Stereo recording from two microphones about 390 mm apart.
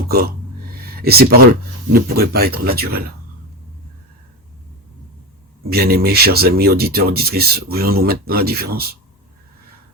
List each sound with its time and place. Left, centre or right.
0.9 s a sound: right
1.9 s speech: right
5.6 s speech: right